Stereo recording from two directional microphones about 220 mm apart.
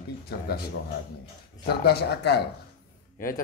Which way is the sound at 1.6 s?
45° left (ahead or behind).